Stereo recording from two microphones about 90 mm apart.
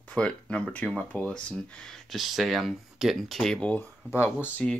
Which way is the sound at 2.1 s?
Centre (ahead or behind).